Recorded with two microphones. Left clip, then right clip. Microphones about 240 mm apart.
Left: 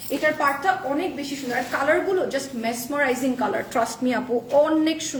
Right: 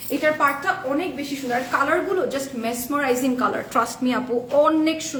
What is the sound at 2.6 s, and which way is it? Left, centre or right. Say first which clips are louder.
A woman's voice: right 1 dB; centre.